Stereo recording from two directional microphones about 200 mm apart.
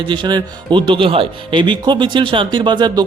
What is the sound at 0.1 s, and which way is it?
Speech, 20° right (ahead or behind).